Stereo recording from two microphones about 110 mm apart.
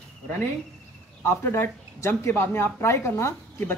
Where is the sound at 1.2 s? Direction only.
20° left (ahead or behind).